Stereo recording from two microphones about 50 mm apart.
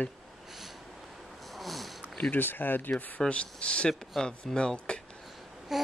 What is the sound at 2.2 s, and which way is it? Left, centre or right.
Speech, left.